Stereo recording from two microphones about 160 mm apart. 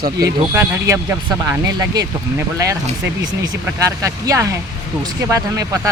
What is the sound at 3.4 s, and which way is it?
Speech, 20° right (ahead or behind).